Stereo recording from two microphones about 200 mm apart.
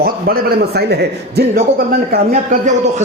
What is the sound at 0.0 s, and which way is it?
A man's voice, 50° right (ahead or behind).